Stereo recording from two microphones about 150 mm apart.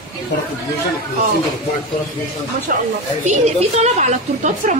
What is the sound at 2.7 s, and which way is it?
Speech, 75° right (ahead or behind).